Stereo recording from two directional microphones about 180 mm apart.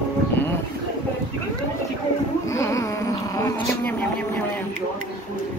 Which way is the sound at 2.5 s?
15° left (ahead or behind).